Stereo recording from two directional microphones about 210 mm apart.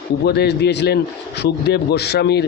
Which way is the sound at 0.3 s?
50° left (ahead or behind).